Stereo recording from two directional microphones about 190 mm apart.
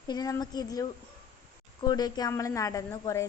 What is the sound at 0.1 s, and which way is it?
A woman's voice, 20° left (ahead or behind).